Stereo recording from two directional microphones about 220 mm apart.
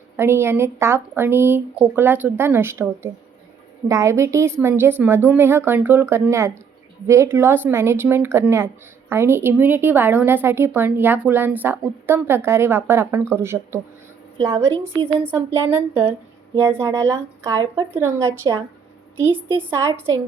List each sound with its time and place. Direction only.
0.2 s speech: 10° right (ahead or behind)
19.7 s speech: 15° right (ahead or behind)